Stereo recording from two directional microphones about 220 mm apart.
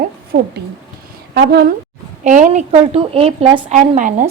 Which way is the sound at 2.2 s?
35° right (ahead or behind).